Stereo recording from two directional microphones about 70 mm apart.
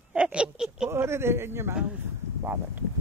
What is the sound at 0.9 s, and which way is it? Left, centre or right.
Speech, right.